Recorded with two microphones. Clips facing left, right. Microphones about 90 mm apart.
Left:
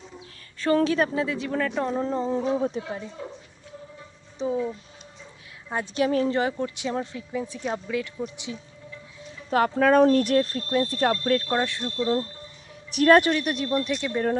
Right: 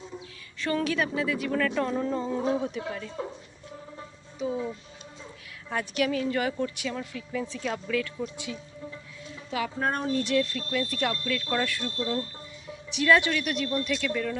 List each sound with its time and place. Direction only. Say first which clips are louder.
0.6 s a man's voice: left 6 dB; 35° left (ahead or behind)
4.4 s a man's voice: left 3 dB; 30° left (ahead or behind)
5.6 s speech: left 3 dB; 25° left (ahead or behind)
9.5 s speech: left 9 dB; 50° left (ahead or behind)
9.7 s speech: left 11 dB; 85° left; by 11.1 s 35° left (ahead or behind)
11.1 s speech: left 8 dB; 45° left (ahead or behind)
11.4 s speech: left 3 dB; 25° left (ahead or behind)
12.9 s speech: left 5 dB; 50° left (ahead or behind)
13.3 s a man's voice: left 3 dB; 30° left (ahead or behind)